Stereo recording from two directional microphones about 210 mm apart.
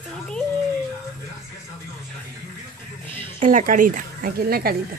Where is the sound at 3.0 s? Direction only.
25° right (ahead or behind).